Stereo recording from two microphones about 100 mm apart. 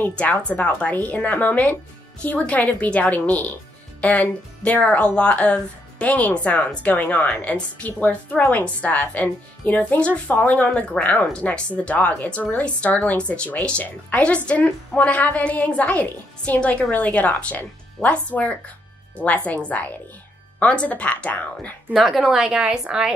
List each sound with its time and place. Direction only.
0.0 s a woman's voice: 15° left (ahead or behind)
21.9 s a woman's voice: centre (ahead or behind)